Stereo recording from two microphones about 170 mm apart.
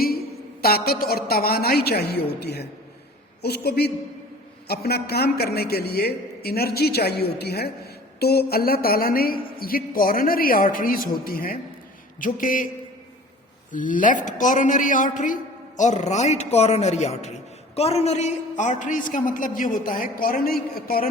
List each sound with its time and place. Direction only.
0.6 s a woman's voice: 65° left (ahead or behind)
13.7 s a man's voice: 50° left (ahead or behind)